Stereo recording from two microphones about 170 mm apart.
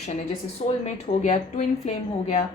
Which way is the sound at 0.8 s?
45° left (ahead or behind).